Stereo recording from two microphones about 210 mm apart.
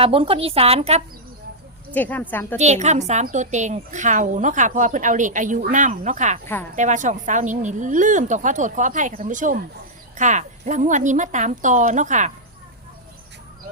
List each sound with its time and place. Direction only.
0.0 s a woman's voice: 25° right (ahead or behind)
1.9 s speech: 10° left (ahead or behind)
2.6 s a woman's voice: 35° right (ahead or behind)